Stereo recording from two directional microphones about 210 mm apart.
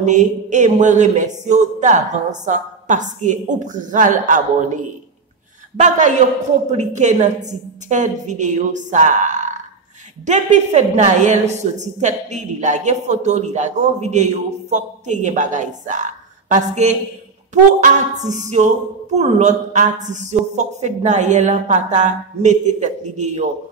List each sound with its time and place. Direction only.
0.0 s a woman's voice: 35° right (ahead or behind)
5.8 s a woman's voice: 35° right (ahead or behind)